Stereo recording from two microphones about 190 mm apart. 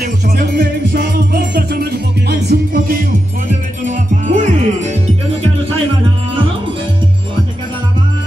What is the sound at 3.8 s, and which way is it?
Music, 45° right (ahead or behind).